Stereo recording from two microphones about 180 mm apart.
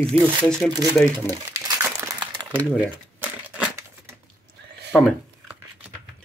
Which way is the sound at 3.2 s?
10° right (ahead or behind).